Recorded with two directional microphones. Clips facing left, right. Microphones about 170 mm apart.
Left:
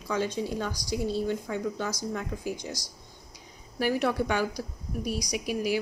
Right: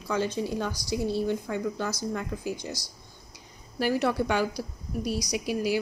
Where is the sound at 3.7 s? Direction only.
15° left (ahead or behind).